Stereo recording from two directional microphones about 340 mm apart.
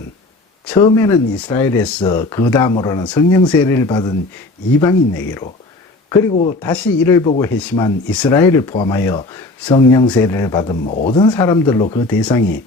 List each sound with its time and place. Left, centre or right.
0.7 s speech: centre
6.3 s speech: left
6.6 s speech: centre